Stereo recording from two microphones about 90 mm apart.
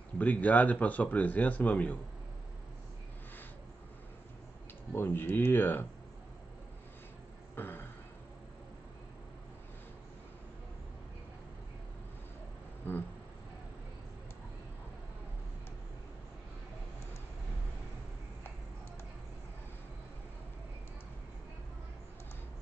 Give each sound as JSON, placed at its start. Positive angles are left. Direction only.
{"t": 0.2, "sound": "speech", "side_deg": 15}
{"t": 4.9, "sound": "speech", "side_deg": 25}
{"t": 7.5, "sound": "a sound", "side_deg": 25}
{"t": 12.9, "sound": "insect", "side_deg": 25}